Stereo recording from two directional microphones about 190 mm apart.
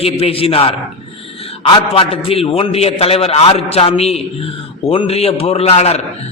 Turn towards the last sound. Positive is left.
turn(degrees=35)  # may be behind; listen again after turning